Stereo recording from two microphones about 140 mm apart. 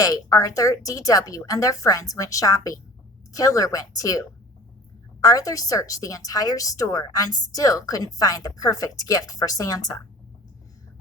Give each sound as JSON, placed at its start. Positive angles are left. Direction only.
{"t": 0.0, "sound": "a woman's voice", "side_deg": 25}
{"t": 5.2, "sound": "a woman's voice", "side_deg": 25}